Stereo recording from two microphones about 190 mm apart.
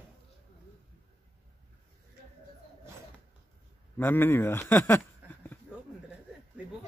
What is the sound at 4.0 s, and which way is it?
Speech, 10° left (ahead or behind).